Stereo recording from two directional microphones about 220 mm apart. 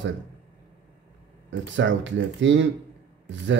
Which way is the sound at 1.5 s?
55° right (ahead or behind).